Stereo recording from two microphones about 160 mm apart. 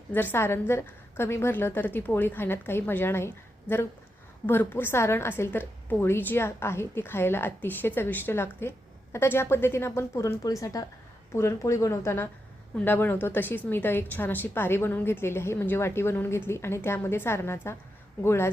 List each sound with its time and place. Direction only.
0.1 s a woman's voice: 10° left (ahead or behind)